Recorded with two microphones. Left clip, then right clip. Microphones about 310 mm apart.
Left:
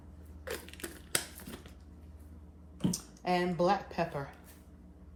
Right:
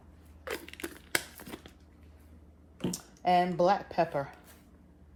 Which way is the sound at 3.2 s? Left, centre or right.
Right.